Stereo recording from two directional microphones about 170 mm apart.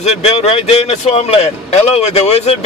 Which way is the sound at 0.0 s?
40° left (ahead or behind).